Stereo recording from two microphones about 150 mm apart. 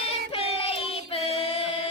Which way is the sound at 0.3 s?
40° left (ahead or behind).